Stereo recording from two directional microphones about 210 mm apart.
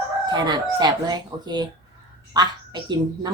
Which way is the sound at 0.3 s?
20° right (ahead or behind).